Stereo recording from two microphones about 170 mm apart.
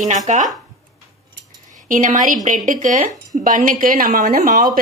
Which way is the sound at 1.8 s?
50° right (ahead or behind).